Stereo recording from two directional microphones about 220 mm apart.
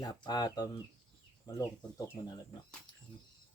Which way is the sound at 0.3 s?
20° left (ahead or behind).